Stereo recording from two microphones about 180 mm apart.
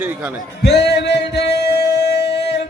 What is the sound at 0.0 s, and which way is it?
Speech, 10° right (ahead or behind).